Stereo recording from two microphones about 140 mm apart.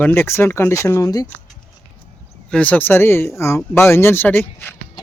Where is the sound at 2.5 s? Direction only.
10° left (ahead or behind).